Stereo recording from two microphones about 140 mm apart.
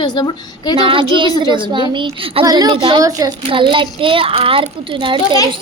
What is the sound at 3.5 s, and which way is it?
A child's voice, 35° right (ahead or behind).